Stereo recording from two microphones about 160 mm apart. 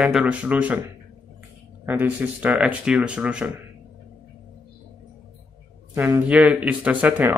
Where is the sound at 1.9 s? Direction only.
10° right (ahead or behind).